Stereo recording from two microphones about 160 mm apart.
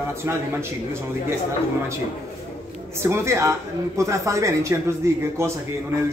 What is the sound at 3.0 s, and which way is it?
A man's voice, 15° right (ahead or behind).